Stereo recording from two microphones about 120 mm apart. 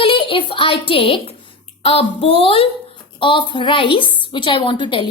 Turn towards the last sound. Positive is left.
turn(degrees=40)  # may be behind; listen again after turning